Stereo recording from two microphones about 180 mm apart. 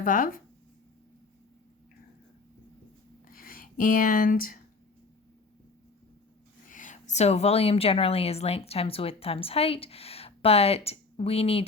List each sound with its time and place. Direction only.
0.0 s speech: 50° left (ahead or behind)
3.2 s writing: 50° left (ahead or behind)
6.7 s a woman's voice: 45° left (ahead or behind)